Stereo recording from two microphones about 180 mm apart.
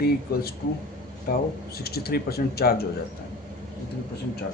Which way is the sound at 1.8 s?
60° left (ahead or behind).